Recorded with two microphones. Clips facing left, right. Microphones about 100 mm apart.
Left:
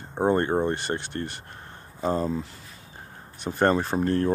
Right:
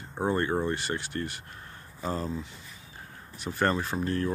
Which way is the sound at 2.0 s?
30° left (ahead or behind).